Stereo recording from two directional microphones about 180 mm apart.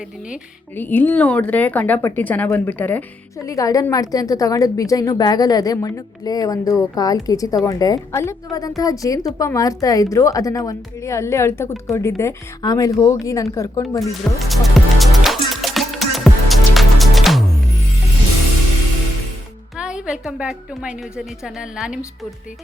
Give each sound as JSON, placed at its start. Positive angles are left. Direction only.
{"t": 0.8, "sound": "a woman's voice", "side_deg": 10}
{"t": 14.5, "sound": "music", "side_deg": 0}
{"t": 19.7, "sound": "a woman's voice", "side_deg": -5}